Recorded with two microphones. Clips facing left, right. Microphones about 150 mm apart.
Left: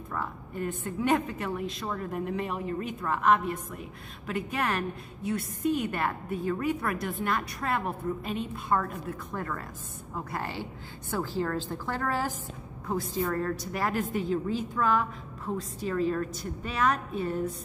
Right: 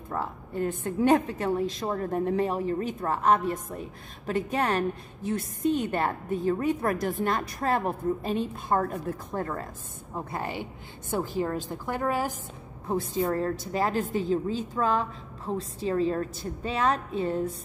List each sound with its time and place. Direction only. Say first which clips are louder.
0.1 s a woman's voice: right 4 dB; 30° right (ahead or behind)
10.1 s a woman's voice: right 2 dB; 20° right (ahead or behind)